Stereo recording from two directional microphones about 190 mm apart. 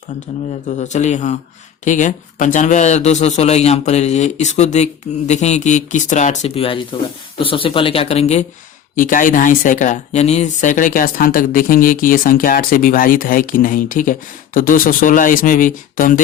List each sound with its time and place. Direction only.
0.8 s speech: 40° left (ahead or behind)
9.0 s speech: 45° left (ahead or behind)